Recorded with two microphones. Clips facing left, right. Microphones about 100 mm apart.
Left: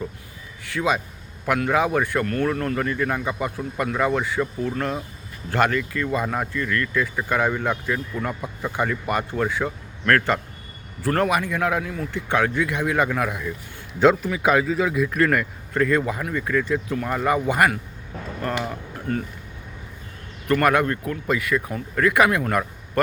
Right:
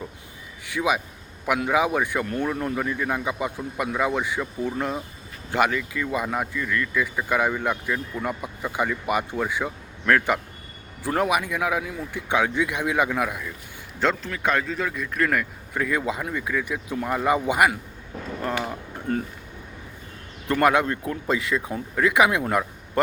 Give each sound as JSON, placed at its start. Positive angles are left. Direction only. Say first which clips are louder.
{"t": 0.6, "sound": "speech", "louder": "left 1 dB", "side_deg": -15}
{"t": 19.1, "sound": "speech", "louder": "even", "side_deg": -25}
{"t": 20.5, "sound": "speech", "louder": "left 1 dB", "side_deg": -20}